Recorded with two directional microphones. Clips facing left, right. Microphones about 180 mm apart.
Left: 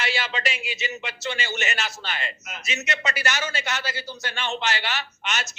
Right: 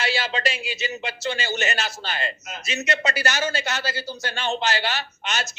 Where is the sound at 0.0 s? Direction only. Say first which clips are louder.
Right 3 dB; 35° right (ahead or behind).